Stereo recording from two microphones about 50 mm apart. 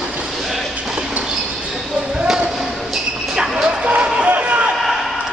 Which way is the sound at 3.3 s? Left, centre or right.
Centre.